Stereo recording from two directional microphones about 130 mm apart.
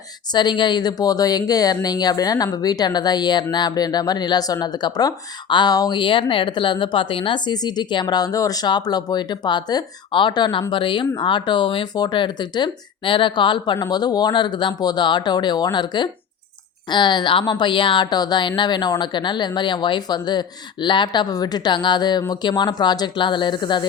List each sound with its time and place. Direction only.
0.3 s speech: 35° left (ahead or behind)